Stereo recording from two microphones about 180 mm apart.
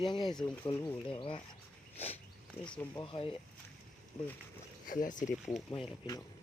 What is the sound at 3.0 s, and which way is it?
Speech, 30° left (ahead or behind).